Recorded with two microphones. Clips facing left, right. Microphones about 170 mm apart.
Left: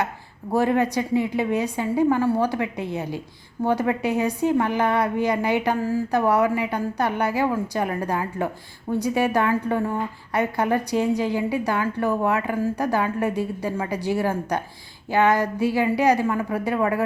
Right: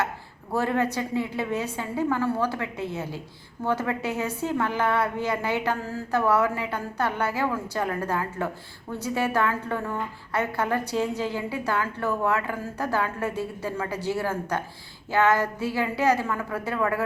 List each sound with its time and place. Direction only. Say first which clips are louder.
0.5 s a woman's voice: left 4 dB; 15° left (ahead or behind)